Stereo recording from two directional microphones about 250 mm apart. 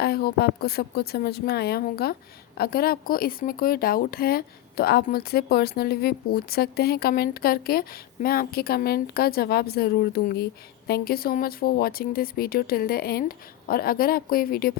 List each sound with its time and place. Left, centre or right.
0.0 s speech: left